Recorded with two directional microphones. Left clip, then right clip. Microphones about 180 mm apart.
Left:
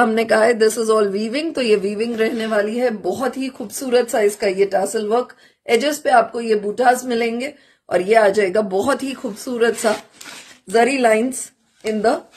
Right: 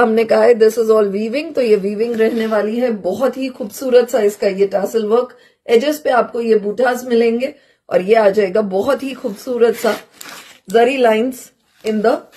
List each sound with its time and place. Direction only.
0.0 s speech: 35° left (ahead or behind)